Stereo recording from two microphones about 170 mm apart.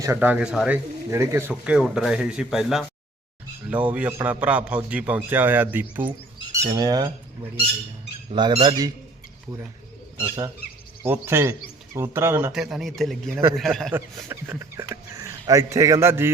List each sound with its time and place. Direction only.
0.0 s a man's voice: 15° right (ahead or behind)
1.1 s a man's voice: 15° right (ahead or behind)
6.5 s squawk: 20° right (ahead or behind)
8.3 s speech: 30° right (ahead or behind)
10.2 s a man's voice: 15° right (ahead or behind)
12.5 s speech: centre (ahead or behind)
13.9 s a man's voice: 15° right (ahead or behind)